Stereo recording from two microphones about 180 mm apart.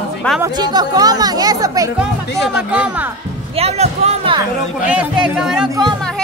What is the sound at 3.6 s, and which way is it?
Speech, 35° right (ahead or behind).